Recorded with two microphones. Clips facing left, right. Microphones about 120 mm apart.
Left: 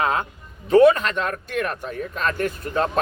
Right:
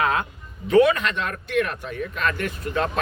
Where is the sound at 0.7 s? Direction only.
40° left (ahead or behind).